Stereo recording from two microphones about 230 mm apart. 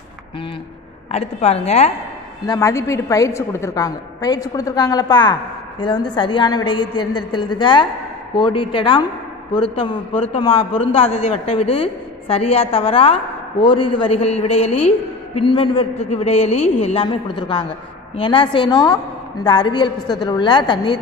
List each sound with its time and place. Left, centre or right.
1.1 s a man's voice: left
2.4 s a woman's voice: centre